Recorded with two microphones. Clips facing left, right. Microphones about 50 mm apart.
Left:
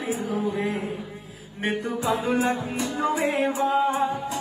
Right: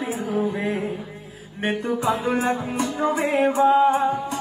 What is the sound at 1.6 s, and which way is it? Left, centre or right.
Music, right.